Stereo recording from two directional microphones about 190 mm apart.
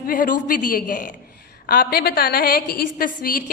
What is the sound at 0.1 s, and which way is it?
A woman's voice, 50° left (ahead or behind).